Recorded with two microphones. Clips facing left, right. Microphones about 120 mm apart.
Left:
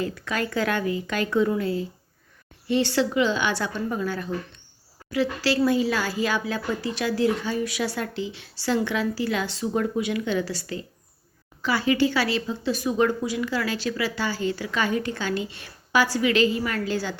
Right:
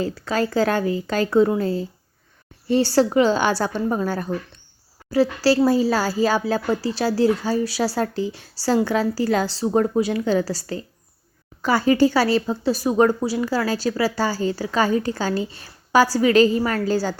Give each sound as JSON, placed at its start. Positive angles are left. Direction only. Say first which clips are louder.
{"t": 0.0, "sound": "speech", "louder": "right 5 dB", "side_deg": -35}